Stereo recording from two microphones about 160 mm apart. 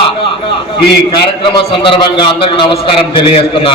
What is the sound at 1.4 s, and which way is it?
A man's voice, 30° left (ahead or behind).